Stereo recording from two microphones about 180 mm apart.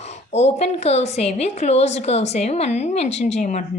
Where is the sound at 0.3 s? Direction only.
35° left (ahead or behind).